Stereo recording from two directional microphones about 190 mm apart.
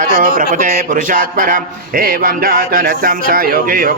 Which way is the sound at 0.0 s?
45° right (ahead or behind).